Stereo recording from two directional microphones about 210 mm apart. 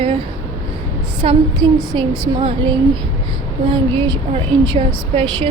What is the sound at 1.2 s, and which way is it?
Speech, 25° right (ahead or behind).